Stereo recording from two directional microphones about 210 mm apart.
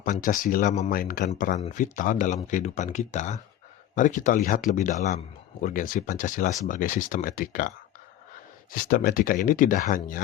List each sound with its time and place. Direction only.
0.0 s speech: 40° left (ahead or behind)
8.7 s speech: 45° left (ahead or behind)